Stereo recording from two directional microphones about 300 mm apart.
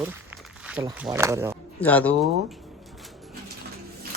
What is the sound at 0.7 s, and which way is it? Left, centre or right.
Speech, centre.